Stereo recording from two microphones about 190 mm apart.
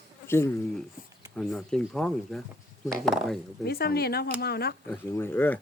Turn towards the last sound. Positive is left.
turn(degrees=10)  # may be behind; listen again after turning